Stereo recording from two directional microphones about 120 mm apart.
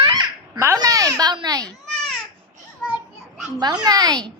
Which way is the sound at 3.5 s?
35° right (ahead or behind).